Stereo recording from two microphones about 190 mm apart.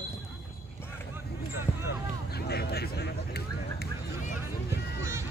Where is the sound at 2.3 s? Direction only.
60° left (ahead or behind).